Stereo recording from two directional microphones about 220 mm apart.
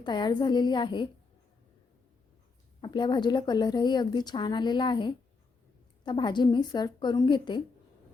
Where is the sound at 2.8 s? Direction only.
20° left (ahead or behind).